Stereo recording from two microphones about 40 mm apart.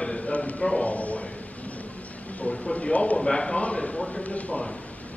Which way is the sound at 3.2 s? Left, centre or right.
Centre.